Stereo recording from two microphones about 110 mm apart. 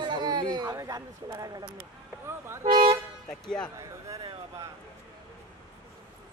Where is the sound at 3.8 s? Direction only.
30° right (ahead or behind).